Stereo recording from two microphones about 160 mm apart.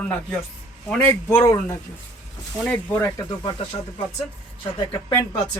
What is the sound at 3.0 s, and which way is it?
Speech, 25° left (ahead or behind).